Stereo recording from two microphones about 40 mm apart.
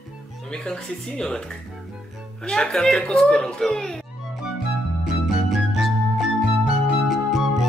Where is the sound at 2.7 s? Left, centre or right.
Centre.